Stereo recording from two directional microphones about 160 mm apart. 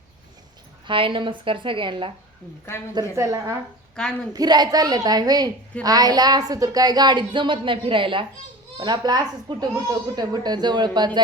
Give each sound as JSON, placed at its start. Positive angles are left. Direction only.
{"t": 0.9, "sound": "a woman's voice", "side_deg": -30}
{"t": 2.9, "sound": "speech", "side_deg": -20}
{"t": 4.0, "sound": "a woman's voice", "side_deg": 5}
{"t": 4.4, "sound": "speech", "side_deg": -25}